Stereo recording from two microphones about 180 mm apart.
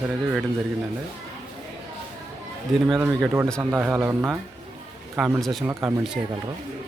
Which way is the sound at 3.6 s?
10° right (ahead or behind).